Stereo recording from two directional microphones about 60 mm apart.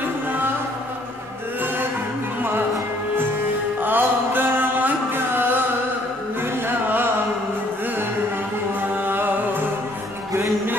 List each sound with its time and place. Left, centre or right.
3.8 s mantra: right
8.9 s music: right